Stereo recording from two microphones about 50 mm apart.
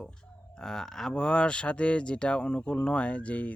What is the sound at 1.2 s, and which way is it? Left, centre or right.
Speech, centre.